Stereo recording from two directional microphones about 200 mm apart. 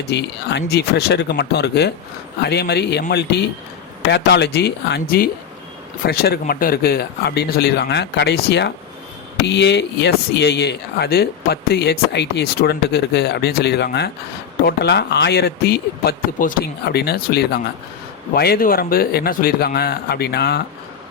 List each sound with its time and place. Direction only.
0.1 s a man's voice: 60° left (ahead or behind)